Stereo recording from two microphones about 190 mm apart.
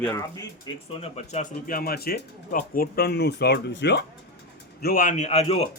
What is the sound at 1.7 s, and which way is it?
Speech, 50° left (ahead or behind).